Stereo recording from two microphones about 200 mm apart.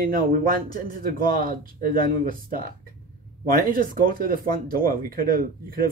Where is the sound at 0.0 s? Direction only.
45° right (ahead or behind).